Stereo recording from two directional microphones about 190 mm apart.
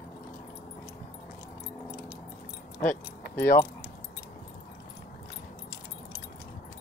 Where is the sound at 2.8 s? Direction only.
50° left (ahead or behind).